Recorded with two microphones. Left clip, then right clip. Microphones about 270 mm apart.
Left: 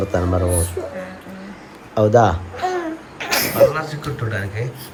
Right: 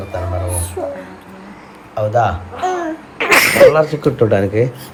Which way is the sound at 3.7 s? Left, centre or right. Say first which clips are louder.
Right 11 dB; centre.